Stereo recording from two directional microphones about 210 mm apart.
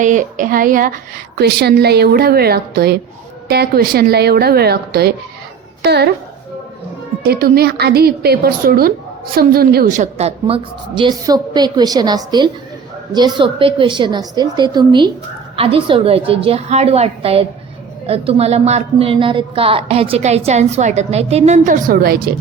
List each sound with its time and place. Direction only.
0.0 s a woman's voice: 35° right (ahead or behind)
7.3 s a woman's voice: 45° right (ahead or behind)